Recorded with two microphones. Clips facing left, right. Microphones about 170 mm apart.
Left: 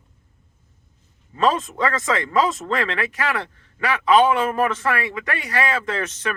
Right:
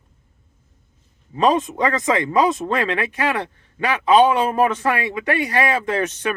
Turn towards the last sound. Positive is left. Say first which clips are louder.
# right 4 dB
turn(degrees=-20)  # may be behind; listen again after turning